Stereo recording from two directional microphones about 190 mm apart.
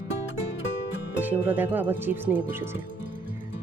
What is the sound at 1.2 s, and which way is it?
Speech, 10° right (ahead or behind).